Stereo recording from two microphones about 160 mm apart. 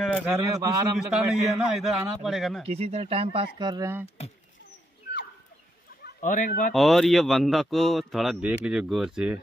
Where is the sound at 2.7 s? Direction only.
40° right (ahead or behind).